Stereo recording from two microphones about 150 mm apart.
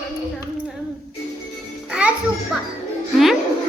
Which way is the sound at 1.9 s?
5° right (ahead or behind).